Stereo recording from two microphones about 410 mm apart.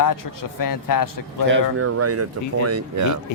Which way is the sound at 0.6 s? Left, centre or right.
Left.